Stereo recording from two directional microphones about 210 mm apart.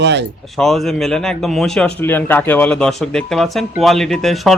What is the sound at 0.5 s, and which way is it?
Speech, centre (ahead or behind).